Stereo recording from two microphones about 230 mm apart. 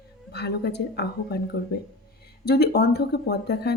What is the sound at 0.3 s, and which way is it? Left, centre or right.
A woman's voice, left.